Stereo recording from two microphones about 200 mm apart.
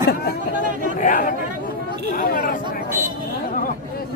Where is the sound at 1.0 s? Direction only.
45° left (ahead or behind).